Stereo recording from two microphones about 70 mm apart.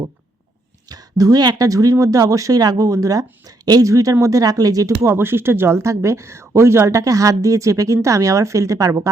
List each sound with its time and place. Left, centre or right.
0.9 s speech: right
5.0 s speech: right